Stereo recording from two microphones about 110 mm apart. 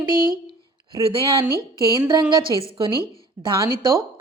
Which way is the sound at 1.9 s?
40° right (ahead or behind).